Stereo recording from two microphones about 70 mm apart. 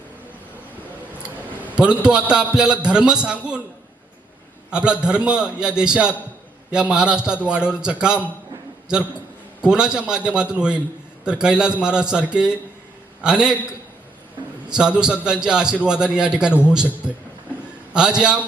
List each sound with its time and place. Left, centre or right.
1.7 s a man's voice: centre
4.7 s a man's voice: centre
9.6 s a man's voice: centre
14.7 s a man's voice: centre